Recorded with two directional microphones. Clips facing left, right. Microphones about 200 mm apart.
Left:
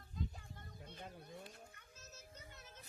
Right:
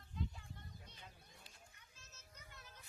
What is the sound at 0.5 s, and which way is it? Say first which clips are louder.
Children playing: left 4 dB; 55° left (ahead or behind).